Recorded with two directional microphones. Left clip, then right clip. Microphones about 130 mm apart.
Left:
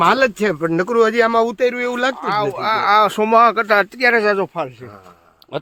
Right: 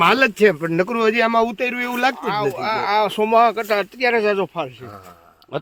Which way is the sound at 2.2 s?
65° left (ahead or behind).